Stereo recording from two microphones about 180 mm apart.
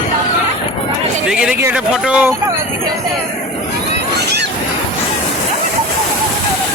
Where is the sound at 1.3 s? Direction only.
5° right (ahead or behind).